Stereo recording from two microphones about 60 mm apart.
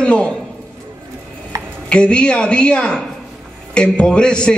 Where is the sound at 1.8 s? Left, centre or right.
Centre.